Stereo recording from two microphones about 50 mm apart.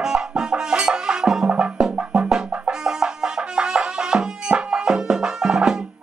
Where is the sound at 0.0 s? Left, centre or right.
Centre.